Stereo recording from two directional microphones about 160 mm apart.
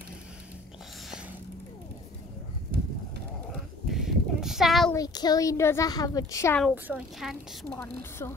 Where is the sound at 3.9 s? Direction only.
Centre (ahead or behind).